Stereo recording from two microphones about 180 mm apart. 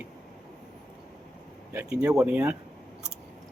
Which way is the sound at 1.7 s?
15° right (ahead or behind).